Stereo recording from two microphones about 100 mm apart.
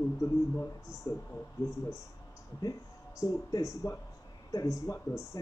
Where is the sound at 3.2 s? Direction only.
35° left (ahead or behind).